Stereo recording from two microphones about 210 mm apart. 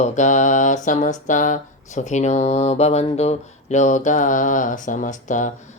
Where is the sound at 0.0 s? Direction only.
35° left (ahead or behind).